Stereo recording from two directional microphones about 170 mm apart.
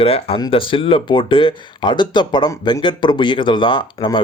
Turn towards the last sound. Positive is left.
turn(degrees=30)  # may be behind; listen again after turning